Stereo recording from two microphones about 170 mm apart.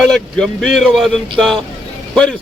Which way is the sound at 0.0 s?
5° left (ahead or behind).